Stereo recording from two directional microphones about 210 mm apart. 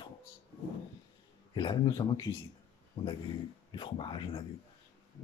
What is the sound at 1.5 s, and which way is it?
Speech, 20° left (ahead or behind).